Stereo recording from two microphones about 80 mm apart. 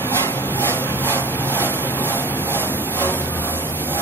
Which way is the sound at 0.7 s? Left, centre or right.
Left.